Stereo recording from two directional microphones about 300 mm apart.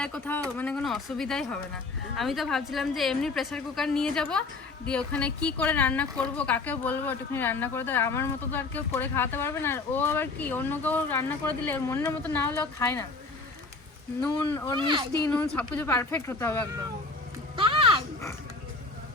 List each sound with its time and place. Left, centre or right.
0.0 s a woman's voice: centre
14.2 s speech: centre
14.8 s speech: centre
15.2 s speech: centre
17.6 s a sound: centre